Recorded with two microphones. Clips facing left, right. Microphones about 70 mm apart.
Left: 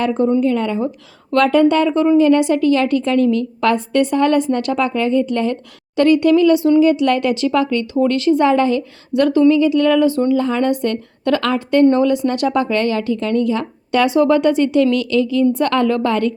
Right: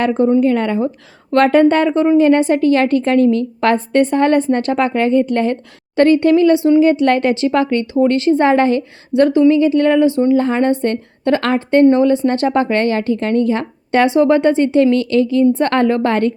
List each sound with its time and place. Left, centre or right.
0.0 s a woman's voice: right
9.1 s a woman's voice: right
10.3 s a woman's voice: right